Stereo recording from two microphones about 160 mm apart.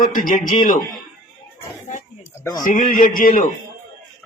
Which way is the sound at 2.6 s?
55° left (ahead or behind).